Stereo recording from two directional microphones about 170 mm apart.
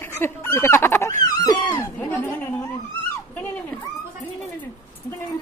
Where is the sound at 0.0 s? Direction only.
15° left (ahead or behind).